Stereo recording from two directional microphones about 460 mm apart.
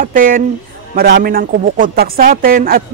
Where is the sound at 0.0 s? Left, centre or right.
Centre.